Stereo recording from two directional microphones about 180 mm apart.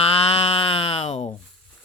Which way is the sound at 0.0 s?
35° left (ahead or behind).